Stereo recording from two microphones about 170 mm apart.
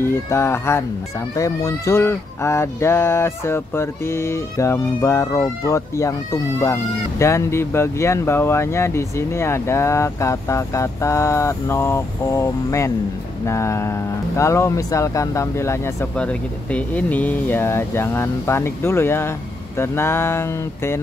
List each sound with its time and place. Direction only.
0.0 s speech: 15° left (ahead or behind)